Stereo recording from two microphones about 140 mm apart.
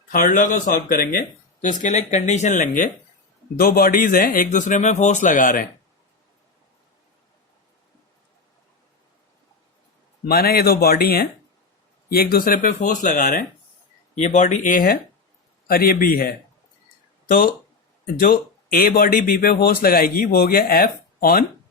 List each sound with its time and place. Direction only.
0.1 s a man's voice: 75° left (ahead or behind); by 1.2 s 90° left
1.6 s speech: 65° left (ahead or behind)
3.6 s a man's voice: 90° left; by 5.6 s 70° left (ahead or behind)
10.2 s speech: 90° left; by 13.4 s 75° left (ahead or behind)
14.2 s speech: 55° left (ahead or behind)
15.6 s speech: 90° left